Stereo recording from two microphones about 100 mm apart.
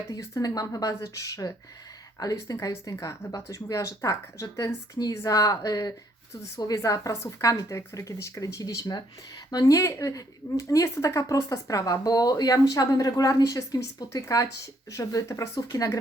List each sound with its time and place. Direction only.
0.1 s speech: 35° left (ahead or behind)